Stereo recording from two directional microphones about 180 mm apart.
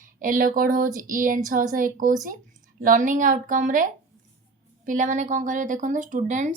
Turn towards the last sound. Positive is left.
turn(degrees=-45)  # may be behind; listen again after turning